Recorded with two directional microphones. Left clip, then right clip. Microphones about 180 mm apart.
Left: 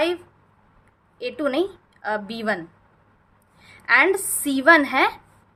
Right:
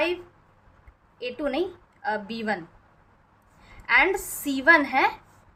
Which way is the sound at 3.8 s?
25° left (ahead or behind).